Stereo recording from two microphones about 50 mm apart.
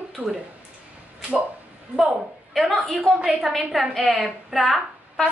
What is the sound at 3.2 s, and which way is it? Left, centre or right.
Speech, right.